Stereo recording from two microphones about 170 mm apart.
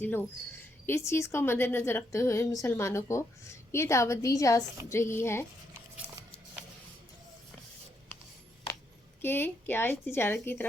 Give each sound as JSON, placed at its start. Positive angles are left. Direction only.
{"t": 0.0, "sound": "speech", "side_deg": 10}
{"t": 9.2, "sound": "speech", "side_deg": 15}